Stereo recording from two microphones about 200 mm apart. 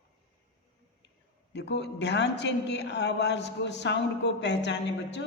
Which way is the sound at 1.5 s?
60° left (ahead or behind).